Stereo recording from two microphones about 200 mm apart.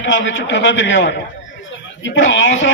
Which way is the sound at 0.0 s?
65° left (ahead or behind).